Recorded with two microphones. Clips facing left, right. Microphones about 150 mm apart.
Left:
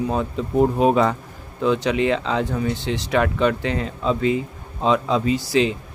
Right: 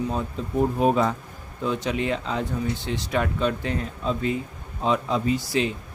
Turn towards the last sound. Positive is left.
turn(degrees=90)